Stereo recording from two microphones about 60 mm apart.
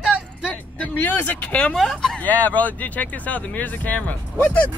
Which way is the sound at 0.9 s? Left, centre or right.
Left.